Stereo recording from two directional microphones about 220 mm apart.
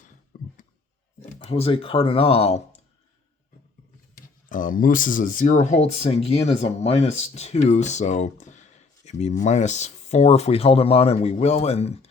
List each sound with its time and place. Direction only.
0.3 s a sound: 40° left (ahead or behind)
1.3 s speech: 30° left (ahead or behind)
4.4 s speech: 35° left (ahead or behind)